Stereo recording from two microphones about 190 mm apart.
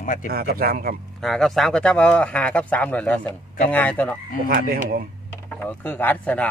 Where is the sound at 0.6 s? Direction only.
50° right (ahead or behind).